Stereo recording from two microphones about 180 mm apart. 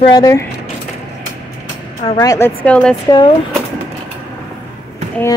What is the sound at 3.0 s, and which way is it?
Speech, 25° left (ahead or behind).